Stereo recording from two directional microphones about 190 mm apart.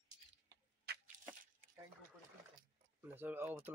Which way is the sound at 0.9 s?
55° right (ahead or behind).